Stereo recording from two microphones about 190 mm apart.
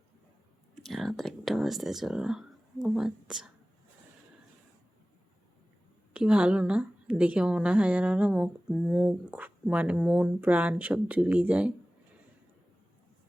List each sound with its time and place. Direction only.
0.9 s speech: centre (ahead or behind)
6.1 s a woman's voice: 5° right (ahead or behind)